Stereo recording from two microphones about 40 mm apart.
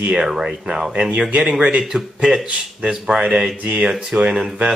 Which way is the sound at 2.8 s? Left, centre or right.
Centre.